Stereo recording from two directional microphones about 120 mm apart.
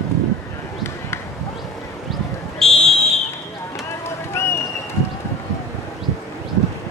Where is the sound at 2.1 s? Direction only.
5° left (ahead or behind).